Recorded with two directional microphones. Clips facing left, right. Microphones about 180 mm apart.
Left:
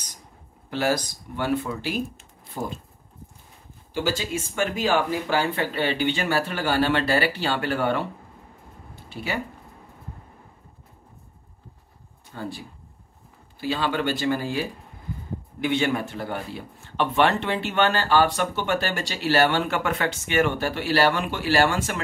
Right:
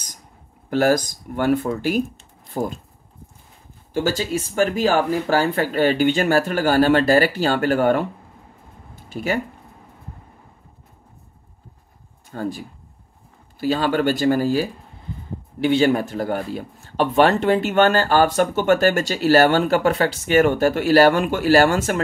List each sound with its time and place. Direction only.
0.7 s speech: 45° right (ahead or behind)
3.9 s speech: 45° right (ahead or behind)
8.9 s a sound: 45° right (ahead or behind)
12.3 s speech: 45° right (ahead or behind)